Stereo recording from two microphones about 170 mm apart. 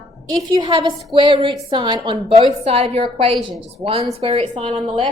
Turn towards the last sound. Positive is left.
turn(degrees=-30)  # may be behind; listen again after turning